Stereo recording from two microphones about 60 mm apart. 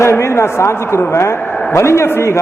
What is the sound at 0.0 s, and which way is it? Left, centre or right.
Speech, left.